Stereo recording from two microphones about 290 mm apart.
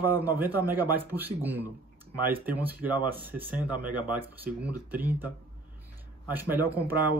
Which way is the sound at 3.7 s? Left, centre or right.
Right.